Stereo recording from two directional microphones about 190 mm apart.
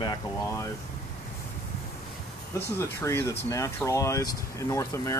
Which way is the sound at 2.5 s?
15° left (ahead or behind).